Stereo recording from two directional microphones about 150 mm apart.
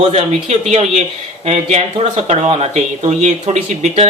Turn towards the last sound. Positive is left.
turn(degrees=-45)  # may be behind; listen again after turning